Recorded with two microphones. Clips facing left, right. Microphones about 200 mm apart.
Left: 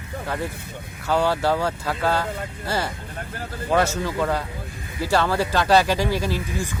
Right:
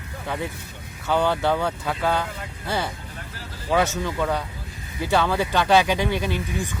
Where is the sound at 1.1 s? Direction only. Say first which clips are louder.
Left 1 dB; centre (ahead or behind).